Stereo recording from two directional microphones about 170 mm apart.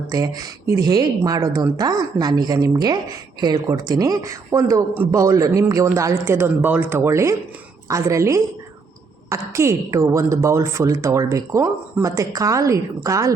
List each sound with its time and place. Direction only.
0.1 s a woman's voice: 20° right (ahead or behind)